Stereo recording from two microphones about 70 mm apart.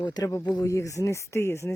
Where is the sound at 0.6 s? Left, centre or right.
Left.